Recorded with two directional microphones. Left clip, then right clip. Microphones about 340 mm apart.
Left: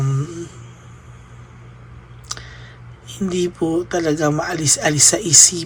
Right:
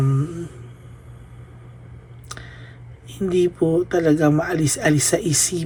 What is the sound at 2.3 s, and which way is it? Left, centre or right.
Clicking, centre.